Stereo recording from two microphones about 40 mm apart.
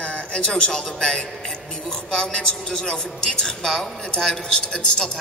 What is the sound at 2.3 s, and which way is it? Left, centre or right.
Speech, left.